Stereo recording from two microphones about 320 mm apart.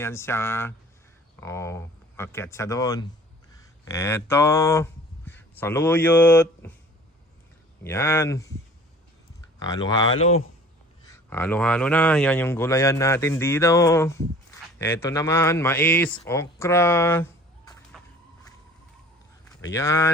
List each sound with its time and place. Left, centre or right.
0.0 s speech: centre
7.9 s speech: centre
9.6 s speech: centre
10.2 s speech: left
11.1 s speech: centre
17.9 s music: centre
19.6 s speech: centre